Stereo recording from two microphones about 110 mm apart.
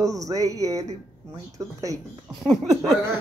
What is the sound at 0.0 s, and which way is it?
Speech, 30° right (ahead or behind).